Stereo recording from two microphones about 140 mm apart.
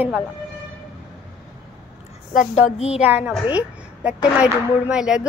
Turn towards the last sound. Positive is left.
turn(degrees=-5)  # may be behind; listen again after turning